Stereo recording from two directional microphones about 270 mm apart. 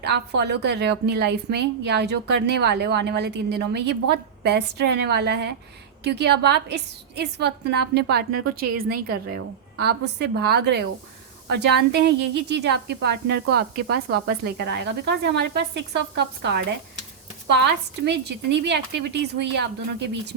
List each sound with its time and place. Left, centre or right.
0.0 s a woman's voice: right